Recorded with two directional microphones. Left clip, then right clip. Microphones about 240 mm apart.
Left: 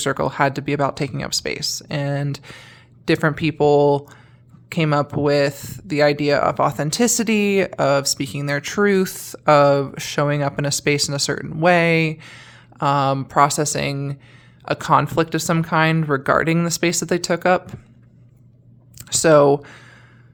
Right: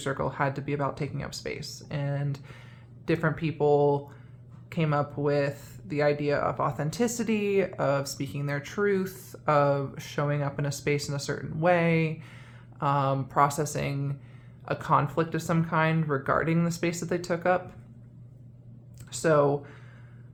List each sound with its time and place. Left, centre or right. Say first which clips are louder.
0.0 s speech: left 10 dB; left
18.9 s speech: left 10 dB; left